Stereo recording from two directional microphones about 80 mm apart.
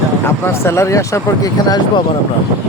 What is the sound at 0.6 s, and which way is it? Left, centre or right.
Speech, left.